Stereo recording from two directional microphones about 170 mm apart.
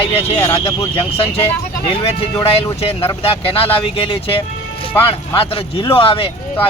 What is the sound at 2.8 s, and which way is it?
Speech, 35° left (ahead or behind).